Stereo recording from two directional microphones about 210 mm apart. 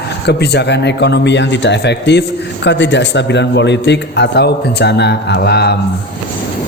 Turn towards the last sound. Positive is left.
turn(degrees=50)  # may be behind; listen again after turning